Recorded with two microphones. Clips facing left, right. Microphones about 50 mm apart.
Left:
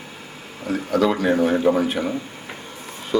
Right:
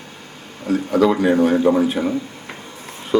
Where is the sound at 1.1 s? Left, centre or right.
Centre.